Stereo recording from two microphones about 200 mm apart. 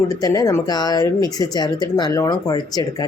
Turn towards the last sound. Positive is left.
turn(degrees=20)  # may be behind; listen again after turning